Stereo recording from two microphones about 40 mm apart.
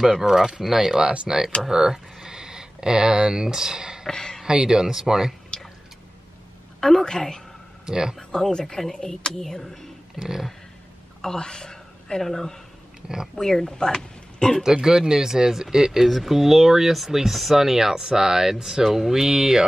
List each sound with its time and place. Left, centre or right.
0.2 s speech: centre
1.0 s speech: right
4.1 s speech: centre
4.5 s speech: centre
5.5 s a sound: centre
6.8 s speech: centre
7.8 s speech: centre
8.2 s speech: centre
10.1 s a sound: centre
11.1 s a woman's voice: centre
14.6 s speech: centre